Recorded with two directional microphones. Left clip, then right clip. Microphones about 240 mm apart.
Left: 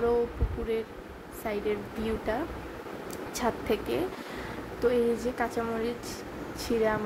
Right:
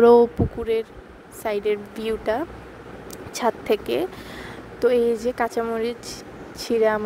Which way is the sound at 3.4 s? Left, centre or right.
Right.